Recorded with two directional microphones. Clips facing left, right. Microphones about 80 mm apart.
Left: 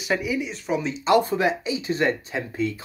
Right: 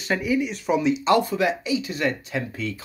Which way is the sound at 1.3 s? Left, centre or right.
Left.